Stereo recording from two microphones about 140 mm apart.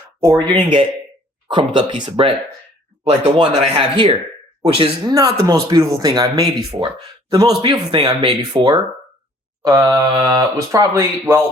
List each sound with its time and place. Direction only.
0.4 s speech: 35° right (ahead or behind)
5.1 s speech: 25° right (ahead or behind)